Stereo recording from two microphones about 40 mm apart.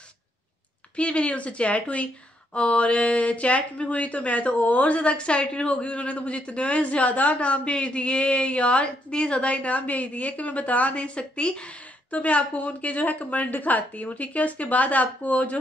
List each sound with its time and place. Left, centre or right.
0.9 s speech: left
12.1 s speech: left